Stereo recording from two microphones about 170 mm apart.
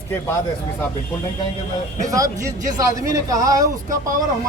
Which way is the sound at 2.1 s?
20° right (ahead or behind).